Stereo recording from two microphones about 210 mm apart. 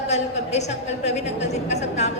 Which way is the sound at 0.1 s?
30° left (ahead or behind).